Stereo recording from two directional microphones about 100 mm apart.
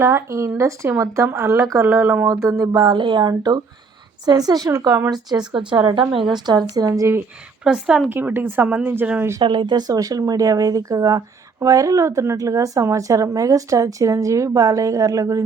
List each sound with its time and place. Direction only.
0.0 s speech: 25° right (ahead or behind)
2.9 s speech: 50° right (ahead or behind); by 5.0 s 35° right (ahead or behind)
5.5 s a woman's voice: 55° right (ahead or behind)
6.3 s speech: 45° right (ahead or behind)
7.6 s speech: 5° right (ahead or behind)
8.1 s speech: 20° right (ahead or behind)
9.4 s speech: 55° right (ahead or behind); by 15.4 s 35° right (ahead or behind)